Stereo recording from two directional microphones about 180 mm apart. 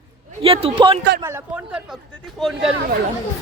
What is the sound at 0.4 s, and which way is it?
Speech, 30° right (ahead or behind).